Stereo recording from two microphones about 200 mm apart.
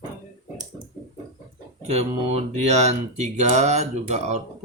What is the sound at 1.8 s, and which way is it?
Speech, 35° right (ahead or behind).